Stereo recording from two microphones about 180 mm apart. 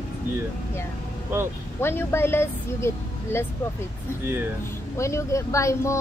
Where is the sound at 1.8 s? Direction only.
15° left (ahead or behind).